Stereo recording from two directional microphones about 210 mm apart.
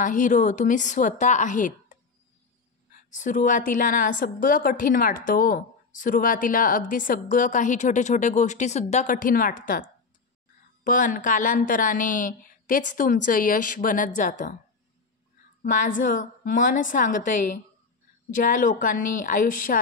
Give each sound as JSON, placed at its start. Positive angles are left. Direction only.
{"t": 0.0, "sound": "a woman's voice", "side_deg": 40}
{"t": 3.1, "sound": "a woman's voice", "side_deg": 40}
{"t": 15.6, "sound": "a woman's voice", "side_deg": 40}